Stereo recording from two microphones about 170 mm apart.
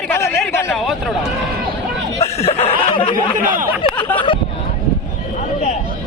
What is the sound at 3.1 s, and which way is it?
Speech, 55° right (ahead or behind).